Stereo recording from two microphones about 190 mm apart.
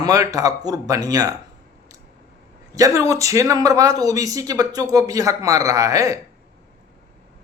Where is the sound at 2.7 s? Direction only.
15° right (ahead or behind).